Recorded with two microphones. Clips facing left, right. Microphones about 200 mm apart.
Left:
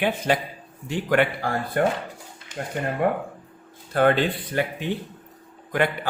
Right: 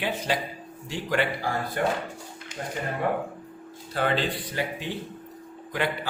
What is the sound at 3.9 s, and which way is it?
Speech, 55° left (ahead or behind).